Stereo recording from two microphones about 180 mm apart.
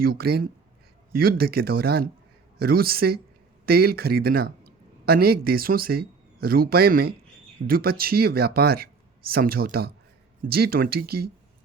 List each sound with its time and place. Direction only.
0.0 s speech: 55° right (ahead or behind)